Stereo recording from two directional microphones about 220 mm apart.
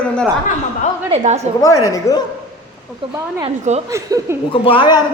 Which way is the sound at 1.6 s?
15° left (ahead or behind).